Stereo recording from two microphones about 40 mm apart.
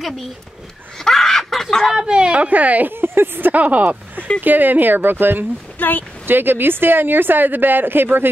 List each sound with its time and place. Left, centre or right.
0.0 s a child's voice: centre
0.9 s a sound: centre
2.0 s a woman's voice: right
2.9 s speech: right
3.5 s speech: right
5.8 s speech: left
6.2 s a woman's voice: right